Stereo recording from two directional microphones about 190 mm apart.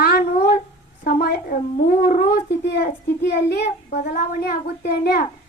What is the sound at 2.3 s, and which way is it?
Speech, 60° left (ahead or behind).